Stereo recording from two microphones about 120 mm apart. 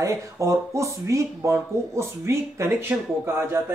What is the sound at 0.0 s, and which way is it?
A man's voice, 25° right (ahead or behind).